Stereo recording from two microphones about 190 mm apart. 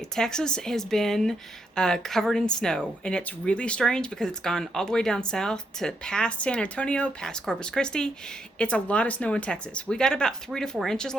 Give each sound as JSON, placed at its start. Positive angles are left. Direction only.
{"t": 0.2, "sound": "speech", "side_deg": 5}